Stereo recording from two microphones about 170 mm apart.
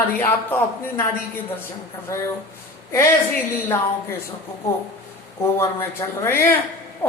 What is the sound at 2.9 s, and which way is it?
Speech, 15° left (ahead or behind).